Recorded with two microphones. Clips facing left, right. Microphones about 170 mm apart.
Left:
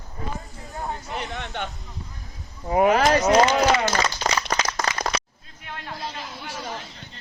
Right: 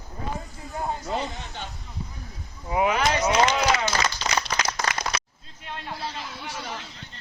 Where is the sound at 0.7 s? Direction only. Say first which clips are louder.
Right 2 dB; 20° right (ahead or behind).